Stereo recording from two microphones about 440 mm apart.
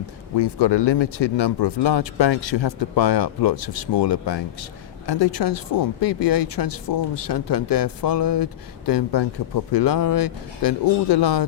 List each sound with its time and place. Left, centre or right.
0.3 s speech: left